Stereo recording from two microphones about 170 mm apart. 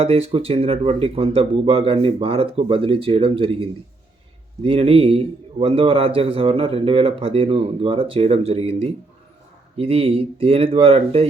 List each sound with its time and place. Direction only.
0.0 s a man's voice: 35° right (ahead or behind)